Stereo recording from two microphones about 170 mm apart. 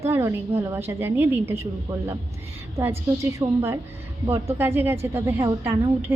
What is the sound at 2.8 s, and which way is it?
A woman's voice, 15° right (ahead or behind).